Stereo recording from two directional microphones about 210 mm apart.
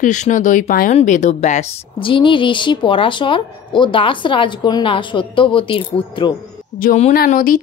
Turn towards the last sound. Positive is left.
turn(degrees=40)  # may be behind; listen again after turning